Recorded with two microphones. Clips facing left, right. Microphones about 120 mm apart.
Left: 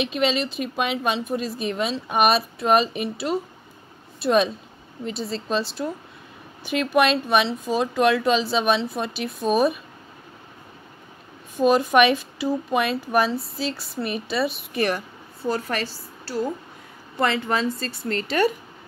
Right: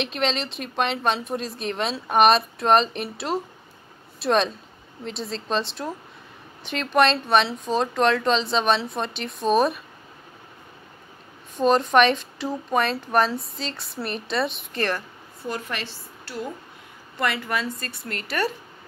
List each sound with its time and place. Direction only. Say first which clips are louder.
0.0 s speech: left 3 dB; centre (ahead or behind)
11.5 s a woman's voice: left 1 dB; 5° left (ahead or behind)
14.8 s speech: left 3 dB; 15° left (ahead or behind)
15.4 s a woman's voice: left 5 dB; 35° left (ahead or behind)